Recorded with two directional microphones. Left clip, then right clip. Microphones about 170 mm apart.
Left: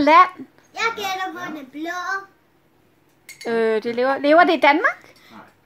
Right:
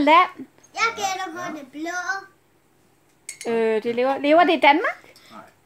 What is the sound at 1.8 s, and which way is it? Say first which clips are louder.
Child singing: left 1 dB; 20° left (ahead or behind).